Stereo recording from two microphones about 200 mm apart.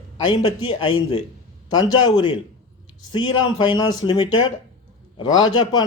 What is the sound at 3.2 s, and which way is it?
Speech, 80° left.